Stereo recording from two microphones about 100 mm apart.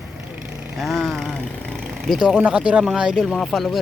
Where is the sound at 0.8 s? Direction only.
Centre (ahead or behind).